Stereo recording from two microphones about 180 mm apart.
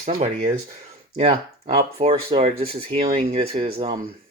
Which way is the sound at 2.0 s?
30° right (ahead or behind).